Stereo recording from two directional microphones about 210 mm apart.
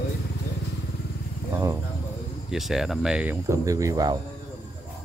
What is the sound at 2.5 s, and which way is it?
Speech, centre (ahead or behind).